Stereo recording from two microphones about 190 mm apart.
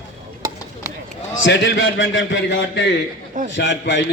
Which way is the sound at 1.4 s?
85° left.